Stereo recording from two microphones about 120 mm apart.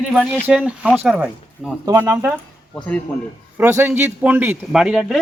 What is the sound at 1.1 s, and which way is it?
Speech, 5° right (ahead or behind).